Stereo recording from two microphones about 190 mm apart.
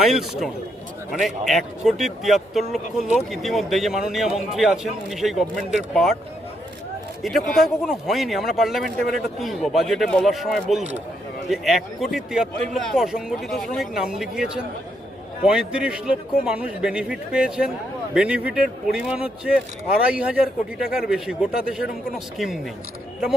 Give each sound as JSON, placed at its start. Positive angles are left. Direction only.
{"t": 0.0, "sound": "speech", "side_deg": 0}
{"t": 7.2, "sound": "speech", "side_deg": 0}